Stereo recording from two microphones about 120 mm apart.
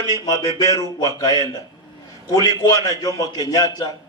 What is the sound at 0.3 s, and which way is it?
A man's voice, 30° left (ahead or behind).